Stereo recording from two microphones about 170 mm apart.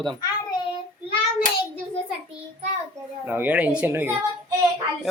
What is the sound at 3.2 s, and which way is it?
Speech, 10° right (ahead or behind).